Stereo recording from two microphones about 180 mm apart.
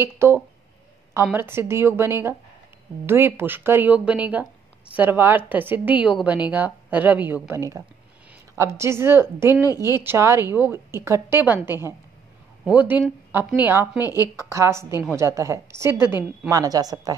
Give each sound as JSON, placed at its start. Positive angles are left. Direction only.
{"t": 0.0, "sound": "a woman's voice", "side_deg": -15}
{"t": 9.5, "sound": "a woman's voice", "side_deg": 20}
{"t": 9.9, "sound": "a woman's voice", "side_deg": -15}
{"t": 13.9, "sound": "a woman's voice", "side_deg": 20}
{"t": 14.3, "sound": "a woman's voice", "side_deg": -15}